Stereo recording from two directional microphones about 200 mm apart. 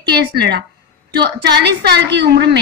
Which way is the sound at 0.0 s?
55° right (ahead or behind).